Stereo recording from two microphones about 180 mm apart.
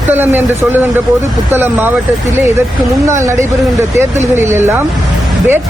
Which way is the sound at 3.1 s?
15° right (ahead or behind).